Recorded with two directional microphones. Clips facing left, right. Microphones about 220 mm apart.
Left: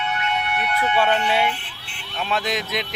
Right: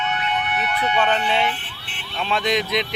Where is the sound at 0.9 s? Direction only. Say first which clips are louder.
Left 1 dB; 10° left (ahead or behind).